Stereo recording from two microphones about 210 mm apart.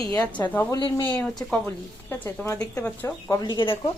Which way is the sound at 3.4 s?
25° left (ahead or behind).